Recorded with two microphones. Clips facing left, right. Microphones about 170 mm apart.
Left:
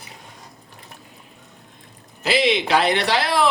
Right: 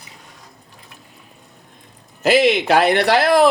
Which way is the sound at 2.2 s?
50° right (ahead or behind).